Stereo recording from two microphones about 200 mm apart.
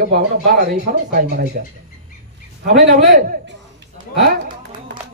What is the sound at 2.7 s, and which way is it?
Speech, 40° right (ahead or behind).